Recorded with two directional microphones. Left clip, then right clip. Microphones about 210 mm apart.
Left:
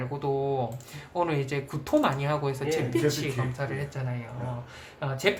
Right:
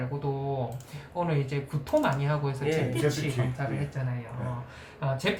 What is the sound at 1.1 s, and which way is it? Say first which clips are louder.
Speech: left 3 dB; 55° left (ahead or behind).